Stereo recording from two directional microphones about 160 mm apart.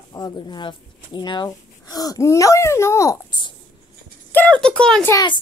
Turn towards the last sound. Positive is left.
turn(degrees=25)  # may be behind; listen again after turning